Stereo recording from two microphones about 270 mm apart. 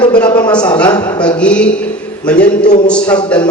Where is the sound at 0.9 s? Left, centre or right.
Centre.